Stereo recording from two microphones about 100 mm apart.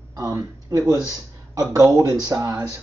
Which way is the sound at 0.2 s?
35° right (ahead or behind).